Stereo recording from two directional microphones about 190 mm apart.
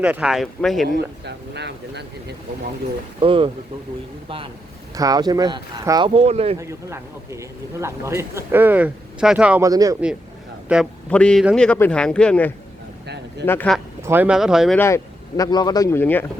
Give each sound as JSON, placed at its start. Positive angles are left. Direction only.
{"t": 0.0, "sound": "speech", "side_deg": -5}
{"t": 0.9, "sound": "speech", "side_deg": -65}
{"t": 3.2, "sound": "speech", "side_deg": -30}
{"t": 4.9, "sound": "speech", "side_deg": -20}
{"t": 6.1, "sound": "speech", "side_deg": -30}
{"t": 6.6, "sound": "speech", "side_deg": -15}
{"t": 10.7, "sound": "speech", "side_deg": -5}
{"t": 14.0, "sound": "speech", "side_deg": -10}
{"t": 14.8, "sound": "speech", "side_deg": 15}